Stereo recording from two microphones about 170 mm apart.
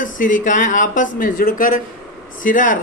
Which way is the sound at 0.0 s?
50° left (ahead or behind).